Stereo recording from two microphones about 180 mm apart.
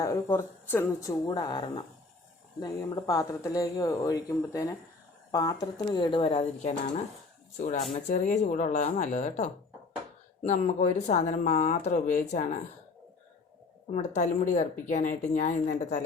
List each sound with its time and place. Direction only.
0.0 s speech: 15° left (ahead or behind); by 7.0 s 40° left (ahead or behind)
8.1 s speech: 45° left (ahead or behind)
13.9 s speech: 40° left (ahead or behind)